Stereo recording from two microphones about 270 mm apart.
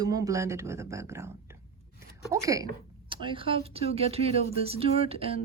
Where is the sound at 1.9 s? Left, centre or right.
Centre.